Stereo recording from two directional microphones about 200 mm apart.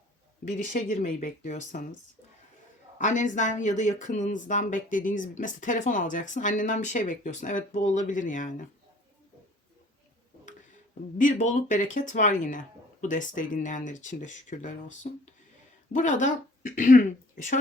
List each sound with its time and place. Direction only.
0.7 s speech: 40° left (ahead or behind)
3.0 s speech: 40° left (ahead or behind)
11.2 s speech: 40° left (ahead or behind)